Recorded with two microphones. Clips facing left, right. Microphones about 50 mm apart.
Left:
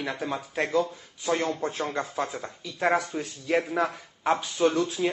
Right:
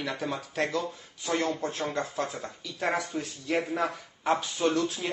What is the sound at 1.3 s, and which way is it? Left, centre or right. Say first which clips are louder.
A man's voice: left 2 dB; centre.